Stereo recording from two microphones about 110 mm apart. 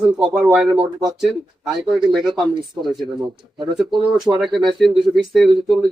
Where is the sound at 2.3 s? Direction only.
45° right (ahead or behind).